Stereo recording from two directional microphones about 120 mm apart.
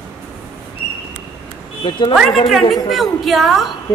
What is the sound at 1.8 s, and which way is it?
Speech, 40° left (ahead or behind).